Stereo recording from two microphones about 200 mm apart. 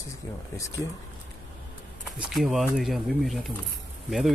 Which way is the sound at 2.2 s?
Centre (ahead or behind).